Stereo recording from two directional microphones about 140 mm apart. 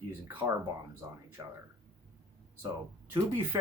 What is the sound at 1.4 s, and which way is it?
Speech, 25° right (ahead or behind).